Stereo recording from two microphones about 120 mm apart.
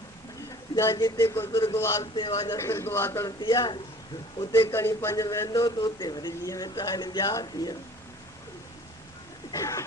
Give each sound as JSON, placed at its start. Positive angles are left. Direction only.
{"t": 0.9, "sound": "a man's voice", "side_deg": 30}
{"t": 2.1, "sound": "speech", "side_deg": 40}
{"t": 2.4, "sound": "a man's voice", "side_deg": 25}
{"t": 3.4, "sound": "speech", "side_deg": 35}
{"t": 4.5, "sound": "a man's voice", "side_deg": 20}
{"t": 9.5, "sound": "a man's voice", "side_deg": 25}